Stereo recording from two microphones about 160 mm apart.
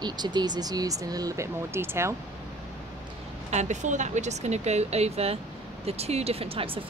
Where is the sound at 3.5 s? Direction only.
45° right (ahead or behind).